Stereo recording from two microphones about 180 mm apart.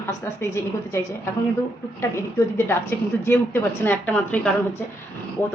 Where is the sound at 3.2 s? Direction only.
15° left (ahead or behind).